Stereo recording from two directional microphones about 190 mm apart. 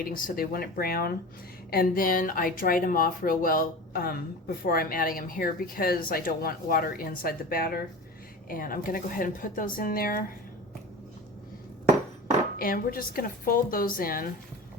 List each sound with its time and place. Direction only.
0.0 s speech: 45° left (ahead or behind)
12.5 s speech: 50° left (ahead or behind)